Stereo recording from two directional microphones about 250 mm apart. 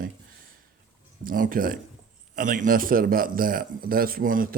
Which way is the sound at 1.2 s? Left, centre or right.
Right.